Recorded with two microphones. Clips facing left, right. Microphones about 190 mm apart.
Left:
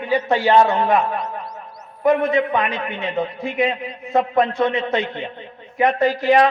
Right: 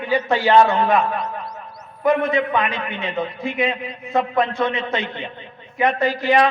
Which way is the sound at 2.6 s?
40° left (ahead or behind).